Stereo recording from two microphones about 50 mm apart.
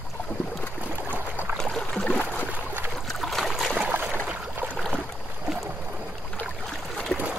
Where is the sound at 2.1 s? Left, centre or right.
Left.